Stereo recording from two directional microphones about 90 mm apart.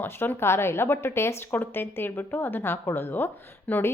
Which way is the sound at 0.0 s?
25° left (ahead or behind).